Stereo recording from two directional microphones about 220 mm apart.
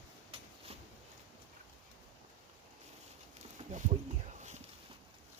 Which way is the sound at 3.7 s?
35° right (ahead or behind).